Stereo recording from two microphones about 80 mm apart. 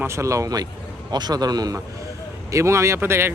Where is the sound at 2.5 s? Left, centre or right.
Right.